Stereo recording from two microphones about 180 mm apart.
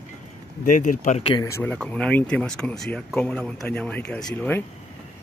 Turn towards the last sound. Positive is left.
turn(degrees=5)  # may be behind; listen again after turning